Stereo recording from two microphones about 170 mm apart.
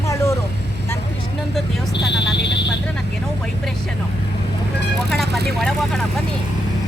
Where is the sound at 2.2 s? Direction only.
85° left.